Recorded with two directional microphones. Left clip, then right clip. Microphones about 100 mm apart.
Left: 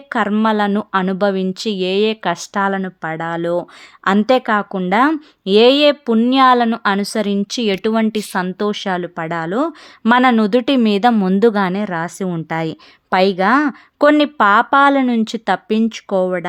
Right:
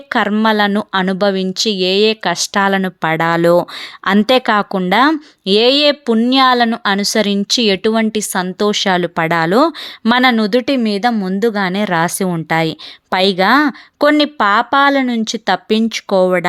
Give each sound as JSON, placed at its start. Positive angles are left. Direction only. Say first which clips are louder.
{"t": 0.1, "sound": "a woman's voice", "louder": "right 3 dB", "side_deg": -10}
{"t": 2.3, "sound": "speech", "louder": "right 4 dB", "side_deg": -25}
{"t": 2.8, "sound": "speech", "louder": "right 8 dB", "side_deg": -45}
{"t": 4.0, "sound": "a woman's voice", "louder": "right 2 dB", "side_deg": -20}
{"t": 9.0, "sound": "a woman's voice", "louder": "right 7 dB", "side_deg": -40}
{"t": 10.0, "sound": "speech", "louder": "even", "side_deg": -5}
{"t": 10.8, "sound": "speech", "louder": "left 2 dB", "side_deg": 10}
{"t": 12.0, "sound": "a woman's voice", "louder": "right 6 dB", "side_deg": -15}